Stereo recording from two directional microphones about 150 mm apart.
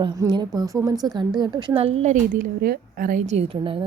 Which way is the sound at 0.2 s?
25° right (ahead or behind).